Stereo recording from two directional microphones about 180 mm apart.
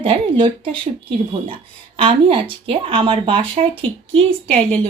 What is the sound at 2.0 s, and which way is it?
Speech, 30° right (ahead or behind).